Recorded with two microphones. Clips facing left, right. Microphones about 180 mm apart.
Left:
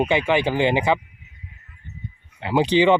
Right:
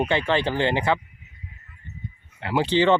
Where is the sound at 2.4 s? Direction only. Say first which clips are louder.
Left 3 dB; 20° left (ahead or behind).